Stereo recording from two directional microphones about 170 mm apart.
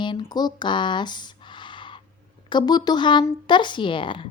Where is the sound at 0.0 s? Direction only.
25° left (ahead or behind).